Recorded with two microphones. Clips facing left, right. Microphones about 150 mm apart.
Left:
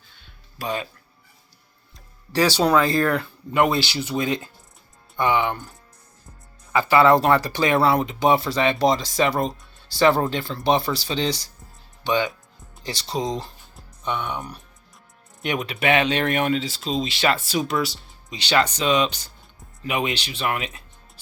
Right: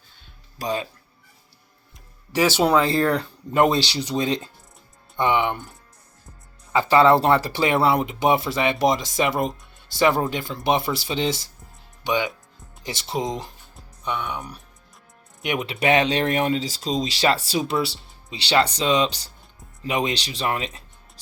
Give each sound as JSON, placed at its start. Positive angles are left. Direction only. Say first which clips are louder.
{"t": 0.6, "sound": "speech", "louder": "right 1 dB", "side_deg": -30}
{"t": 2.3, "sound": "speech", "louder": "even", "side_deg": -15}
{"t": 6.7, "sound": "speech", "louder": "even", "side_deg": -25}
{"t": 13.7, "sound": "speech", "louder": "left 1 dB", "side_deg": -5}
{"t": 15.4, "sound": "speech", "louder": "right 1 dB", "side_deg": -20}